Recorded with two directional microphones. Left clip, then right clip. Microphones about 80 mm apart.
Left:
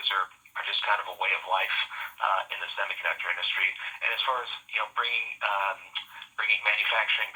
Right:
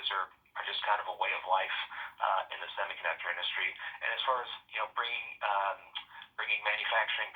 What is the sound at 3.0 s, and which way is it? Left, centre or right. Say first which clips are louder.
Speech: left 5 dB; left.